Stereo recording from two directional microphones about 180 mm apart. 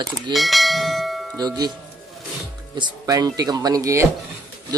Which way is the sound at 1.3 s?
20° right (ahead or behind).